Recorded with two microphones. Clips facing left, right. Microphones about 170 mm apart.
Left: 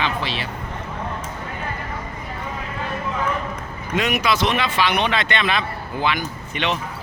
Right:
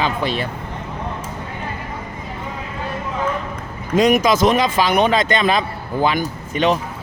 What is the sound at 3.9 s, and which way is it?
Speech, 40° right (ahead or behind).